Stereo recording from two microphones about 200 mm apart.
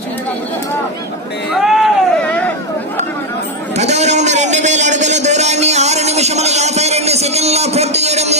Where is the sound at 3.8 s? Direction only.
35° right (ahead or behind).